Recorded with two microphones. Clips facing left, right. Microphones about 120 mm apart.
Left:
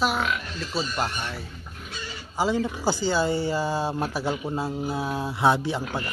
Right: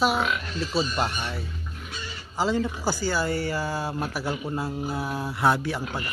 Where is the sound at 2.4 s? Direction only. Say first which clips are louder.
Left 1 dB; 15° left (ahead or behind).